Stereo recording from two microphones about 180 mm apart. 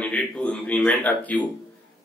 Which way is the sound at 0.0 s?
5° left (ahead or behind).